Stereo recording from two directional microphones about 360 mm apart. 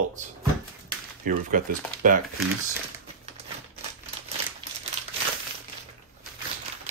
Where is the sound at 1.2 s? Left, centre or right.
Right.